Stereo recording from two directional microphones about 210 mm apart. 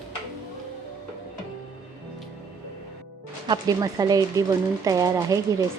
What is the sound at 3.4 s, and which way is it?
Speech, 20° right (ahead or behind).